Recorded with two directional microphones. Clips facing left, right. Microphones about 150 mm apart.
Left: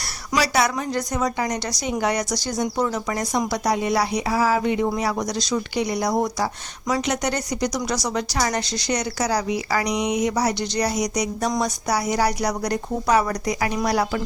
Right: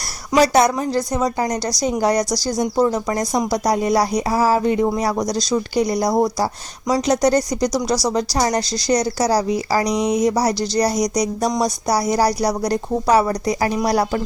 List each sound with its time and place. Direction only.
0.3 s a woman's voice: 45° right (ahead or behind)
0.9 s a woman's voice: 30° right (ahead or behind)